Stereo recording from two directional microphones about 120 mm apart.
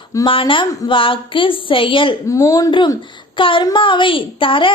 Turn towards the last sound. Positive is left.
turn(degrees=45)  # may be behind; listen again after turning